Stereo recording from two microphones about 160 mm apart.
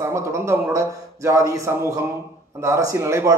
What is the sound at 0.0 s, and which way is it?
A man's voice, 15° right (ahead or behind).